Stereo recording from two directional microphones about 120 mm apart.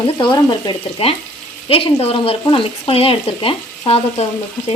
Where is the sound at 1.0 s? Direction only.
55° left (ahead or behind).